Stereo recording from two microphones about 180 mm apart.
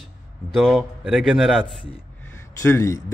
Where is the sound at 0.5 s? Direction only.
Centre (ahead or behind).